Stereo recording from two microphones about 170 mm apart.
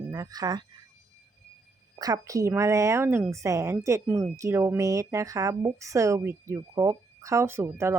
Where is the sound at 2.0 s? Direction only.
20° right (ahead or behind).